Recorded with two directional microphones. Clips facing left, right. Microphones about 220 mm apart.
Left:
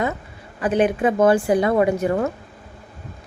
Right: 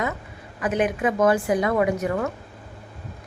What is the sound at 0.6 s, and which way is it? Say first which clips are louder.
Speech: left 4 dB; 30° left (ahead or behind).